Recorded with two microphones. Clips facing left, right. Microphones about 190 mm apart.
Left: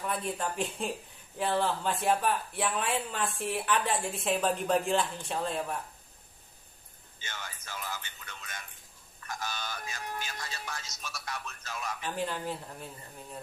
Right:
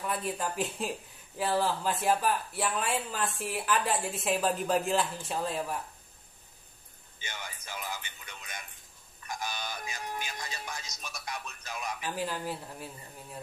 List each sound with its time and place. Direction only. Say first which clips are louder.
0.0 s speech: even; centre (ahead or behind)
7.2 s music: right 1 dB; 15° right (ahead or behind)
9.2 s speech: right 1 dB; 15° right (ahead or behind)
12.1 s speech: left 1 dB; 5° right (ahead or behind)